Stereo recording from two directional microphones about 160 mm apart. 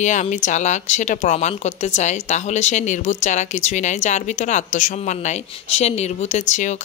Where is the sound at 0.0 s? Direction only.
50° left (ahead or behind).